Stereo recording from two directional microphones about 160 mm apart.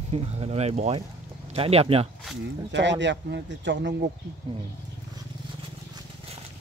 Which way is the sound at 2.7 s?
90° right.